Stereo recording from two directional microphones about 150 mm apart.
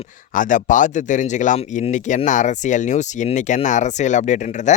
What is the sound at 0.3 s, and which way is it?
Speech, 60° left (ahead or behind).